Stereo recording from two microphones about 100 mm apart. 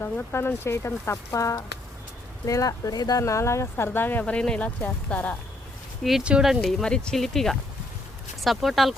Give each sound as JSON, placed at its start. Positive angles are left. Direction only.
{"t": 0.0, "sound": "speech", "side_deg": 20}
{"t": 6.0, "sound": "speech", "side_deg": 0}